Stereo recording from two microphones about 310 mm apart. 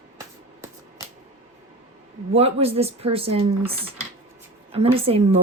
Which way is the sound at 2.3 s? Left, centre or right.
Centre.